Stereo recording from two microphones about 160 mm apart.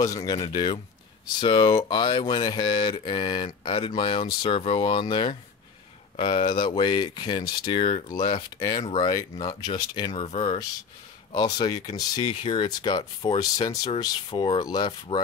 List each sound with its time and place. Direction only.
0.0 s speech: 20° left (ahead or behind)
10.1 s speech: 40° left (ahead or behind)
10.4 s speech: 25° left (ahead or behind)